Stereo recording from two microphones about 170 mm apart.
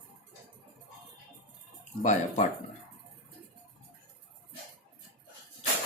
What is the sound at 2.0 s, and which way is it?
Speech, 50° left (ahead or behind).